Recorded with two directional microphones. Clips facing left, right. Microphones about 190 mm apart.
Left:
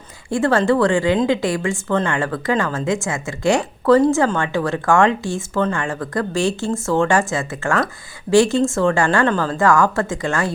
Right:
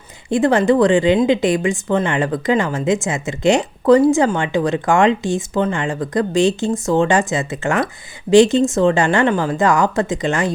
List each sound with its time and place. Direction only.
0.3 s a woman's voice: 20° right (ahead or behind)